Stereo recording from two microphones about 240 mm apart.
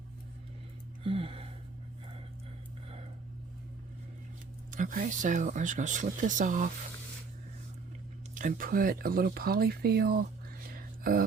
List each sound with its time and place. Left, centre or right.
1.0 s gasp: right
4.7 s speech: right
8.4 s speech: right
10.8 s whispering: right